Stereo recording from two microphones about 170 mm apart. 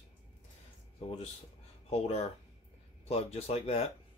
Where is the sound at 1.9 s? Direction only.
35° left (ahead or behind).